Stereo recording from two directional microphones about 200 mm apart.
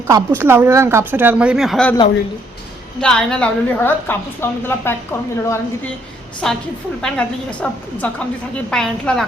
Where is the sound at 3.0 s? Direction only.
5° left (ahead or behind).